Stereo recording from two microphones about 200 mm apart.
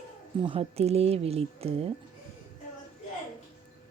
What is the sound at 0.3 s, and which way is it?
Speech, 25° right (ahead or behind).